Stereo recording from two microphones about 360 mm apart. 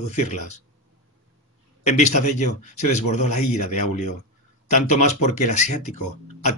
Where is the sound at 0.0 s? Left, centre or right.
Centre.